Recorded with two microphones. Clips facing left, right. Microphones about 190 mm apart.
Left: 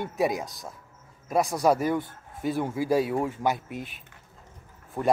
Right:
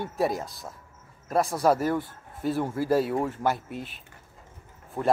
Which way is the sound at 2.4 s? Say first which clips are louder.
Even; centre (ahead or behind).